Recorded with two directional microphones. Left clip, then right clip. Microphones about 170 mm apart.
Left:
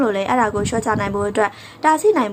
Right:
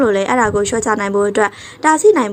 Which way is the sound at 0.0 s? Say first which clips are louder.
Right 4 dB; 20° right (ahead or behind).